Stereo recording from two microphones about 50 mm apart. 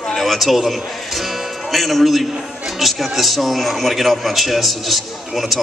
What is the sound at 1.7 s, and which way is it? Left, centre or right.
Speech, centre.